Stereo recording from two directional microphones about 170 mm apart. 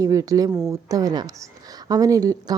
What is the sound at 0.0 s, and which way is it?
Speech, 20° right (ahead or behind).